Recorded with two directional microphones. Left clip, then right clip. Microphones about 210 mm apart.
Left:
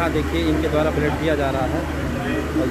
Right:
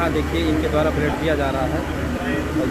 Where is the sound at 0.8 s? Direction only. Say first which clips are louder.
Even; 15° left (ahead or behind).